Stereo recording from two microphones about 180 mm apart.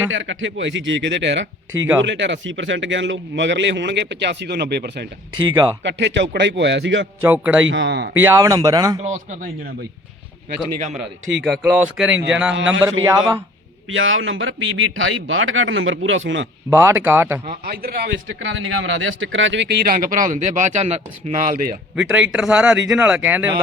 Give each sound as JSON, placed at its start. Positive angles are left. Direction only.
{"t": 0.1, "sound": "a man's voice", "side_deg": -90}
{"t": 5.5, "sound": "speech", "side_deg": -20}
{"t": 5.8, "sound": "a man's voice", "side_deg": -80}
{"t": 7.2, "sound": "speech", "side_deg": -10}
{"t": 7.7, "sound": "speech", "side_deg": -80}
{"t": 8.2, "sound": "speech", "side_deg": -15}
{"t": 9.0, "sound": "speech", "side_deg": -40}
{"t": 11.4, "sound": "speech", "side_deg": -5}
{"t": 13.0, "sound": "speech", "side_deg": -25}
{"t": 13.9, "sound": "a man's voice", "side_deg": -90}
{"t": 16.6, "sound": "speech", "side_deg": -10}
{"t": 17.4, "sound": "speech", "side_deg": -50}
{"t": 21.9, "sound": "speech", "side_deg": -5}